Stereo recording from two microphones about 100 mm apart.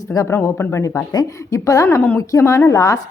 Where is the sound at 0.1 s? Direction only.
30° left (ahead or behind).